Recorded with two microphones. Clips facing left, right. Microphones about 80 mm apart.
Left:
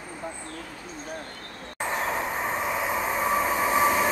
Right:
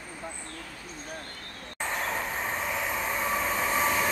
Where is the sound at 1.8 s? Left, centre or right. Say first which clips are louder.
Left 3 dB; centre.